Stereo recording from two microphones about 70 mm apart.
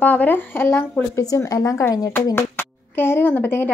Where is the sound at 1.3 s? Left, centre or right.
Left.